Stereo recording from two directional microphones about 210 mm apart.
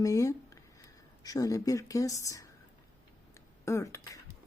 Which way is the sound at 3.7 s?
15° left (ahead or behind).